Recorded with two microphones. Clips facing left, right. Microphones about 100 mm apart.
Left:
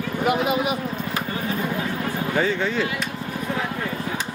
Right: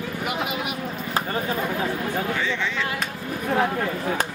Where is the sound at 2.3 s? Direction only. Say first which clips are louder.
Left 4 dB; 45° left (ahead or behind).